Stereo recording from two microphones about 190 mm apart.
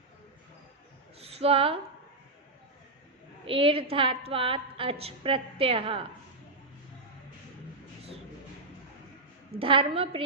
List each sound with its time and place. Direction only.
1.2 s a sound: 30° right (ahead or behind)
3.4 s a woman's voice: 30° right (ahead or behind)
9.6 s a woman's voice: 30° right (ahead or behind)